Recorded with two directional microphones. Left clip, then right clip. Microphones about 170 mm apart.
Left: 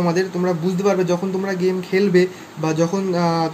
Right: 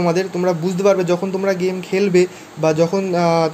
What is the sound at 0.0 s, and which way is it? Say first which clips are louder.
A man's voice: right 2 dB; 30° right (ahead or behind).